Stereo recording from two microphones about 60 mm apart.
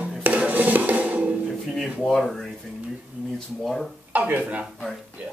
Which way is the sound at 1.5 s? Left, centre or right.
Centre.